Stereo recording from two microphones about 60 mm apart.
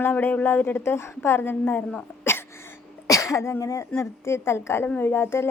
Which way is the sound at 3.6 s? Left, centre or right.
Left.